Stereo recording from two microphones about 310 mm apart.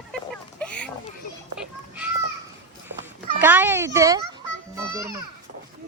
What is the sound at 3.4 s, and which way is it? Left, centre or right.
Speech, centre.